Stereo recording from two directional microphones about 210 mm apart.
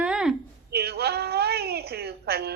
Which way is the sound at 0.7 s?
50° right (ahead or behind).